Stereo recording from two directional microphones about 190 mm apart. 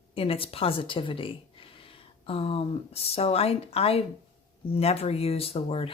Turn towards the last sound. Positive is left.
turn(degrees=30)  # may be behind; listen again after turning